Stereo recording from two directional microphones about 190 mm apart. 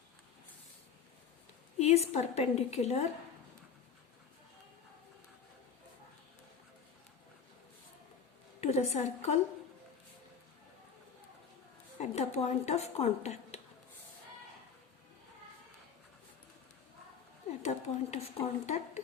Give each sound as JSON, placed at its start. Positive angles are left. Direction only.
{"t": 1.8, "sound": "speech", "side_deg": 35}
{"t": 8.6, "sound": "a woman's voice", "side_deg": 35}
{"t": 11.9, "sound": "speech", "side_deg": 35}
{"t": 17.6, "sound": "speech", "side_deg": 35}